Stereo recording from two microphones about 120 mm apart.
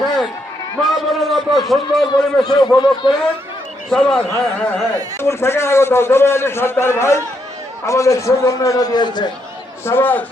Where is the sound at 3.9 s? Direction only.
5° left (ahead or behind); by 9.3 s 35° left (ahead or behind).